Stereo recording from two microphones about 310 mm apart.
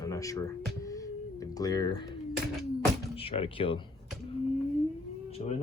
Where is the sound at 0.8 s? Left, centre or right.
Centre.